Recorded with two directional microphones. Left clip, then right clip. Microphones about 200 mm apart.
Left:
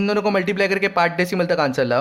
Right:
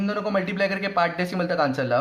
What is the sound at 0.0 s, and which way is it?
Speech, 50° left (ahead or behind).